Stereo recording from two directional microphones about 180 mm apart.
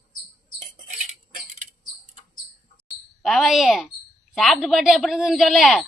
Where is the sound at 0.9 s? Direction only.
45° right (ahead or behind).